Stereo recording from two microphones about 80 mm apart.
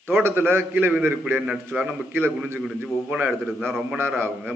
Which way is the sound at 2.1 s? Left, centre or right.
Right.